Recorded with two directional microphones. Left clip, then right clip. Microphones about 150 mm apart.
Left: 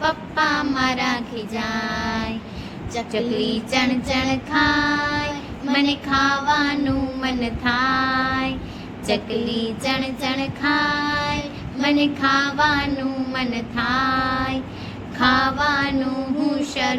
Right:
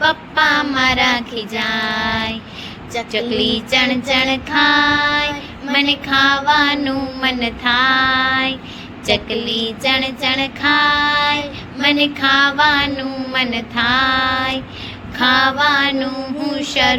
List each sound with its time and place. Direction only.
0.0 s child singing: 20° right (ahead or behind)